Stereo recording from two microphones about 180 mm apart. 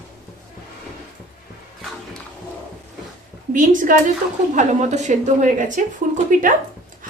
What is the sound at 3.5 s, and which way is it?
Speech, 45° right (ahead or behind).